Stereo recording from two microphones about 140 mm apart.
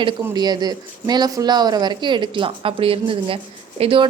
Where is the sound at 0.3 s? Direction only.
30° right (ahead or behind).